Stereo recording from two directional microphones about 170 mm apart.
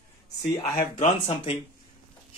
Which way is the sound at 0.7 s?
45° left (ahead or behind).